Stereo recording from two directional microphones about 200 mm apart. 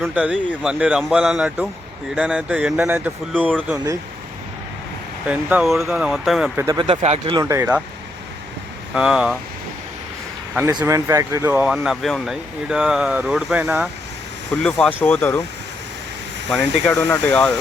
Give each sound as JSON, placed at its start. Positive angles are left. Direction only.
{"t": 0.0, "sound": "speech", "side_deg": -5}
{"t": 3.5, "sound": "speech", "side_deg": 5}
{"t": 5.3, "sound": "speech", "side_deg": -5}
{"t": 6.6, "sound": "speech", "side_deg": -15}
{"t": 6.8, "sound": "speech", "side_deg": -30}
{"t": 7.3, "sound": "speech", "side_deg": -15}
{"t": 9.0, "sound": "speech", "side_deg": -5}
{"t": 10.7, "sound": "speech", "side_deg": -15}
{"t": 14.5, "sound": "speech", "side_deg": 5}
{"t": 16.8, "sound": "speech", "side_deg": 15}